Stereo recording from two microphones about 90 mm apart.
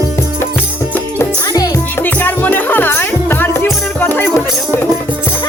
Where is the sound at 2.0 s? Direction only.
20° left (ahead or behind).